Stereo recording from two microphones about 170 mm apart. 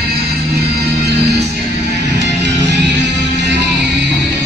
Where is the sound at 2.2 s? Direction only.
90° right.